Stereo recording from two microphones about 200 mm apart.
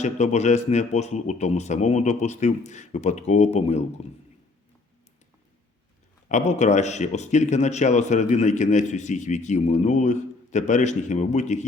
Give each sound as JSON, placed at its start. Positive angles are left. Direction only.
{"t": 0.0, "sound": "speech", "side_deg": 35}
{"t": 6.2, "sound": "speech", "side_deg": 35}